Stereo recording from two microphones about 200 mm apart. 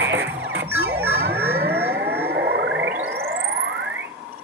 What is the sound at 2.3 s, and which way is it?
Music, 55° right (ahead or behind).